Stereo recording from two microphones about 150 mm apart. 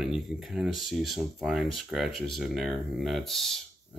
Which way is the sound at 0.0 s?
5° right (ahead or behind).